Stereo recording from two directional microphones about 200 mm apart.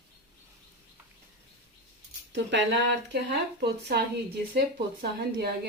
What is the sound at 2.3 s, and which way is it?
A woman's voice, 60° right (ahead or behind).